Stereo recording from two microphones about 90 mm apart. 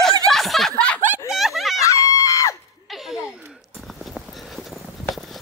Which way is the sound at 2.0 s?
35° left (ahead or behind).